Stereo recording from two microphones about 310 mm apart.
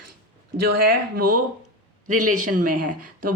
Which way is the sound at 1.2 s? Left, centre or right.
Right.